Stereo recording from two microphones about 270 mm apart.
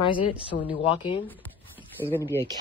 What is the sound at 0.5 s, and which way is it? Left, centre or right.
Speech, left.